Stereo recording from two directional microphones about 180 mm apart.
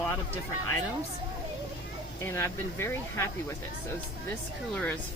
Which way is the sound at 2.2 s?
15° left (ahead or behind).